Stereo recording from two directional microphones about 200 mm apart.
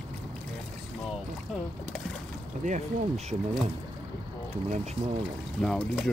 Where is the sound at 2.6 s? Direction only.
35° right (ahead or behind).